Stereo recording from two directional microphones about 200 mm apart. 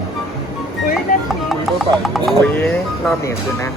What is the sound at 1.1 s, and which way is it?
Speech, 45° left (ahead or behind).